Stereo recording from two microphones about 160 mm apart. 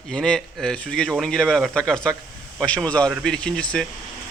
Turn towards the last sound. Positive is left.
turn(degrees=5)  # may be behind; listen again after turning